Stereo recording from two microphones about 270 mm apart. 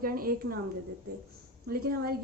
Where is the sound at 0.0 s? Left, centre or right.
Right.